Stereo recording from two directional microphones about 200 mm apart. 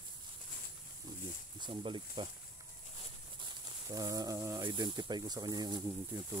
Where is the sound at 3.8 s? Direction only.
15° right (ahead or behind).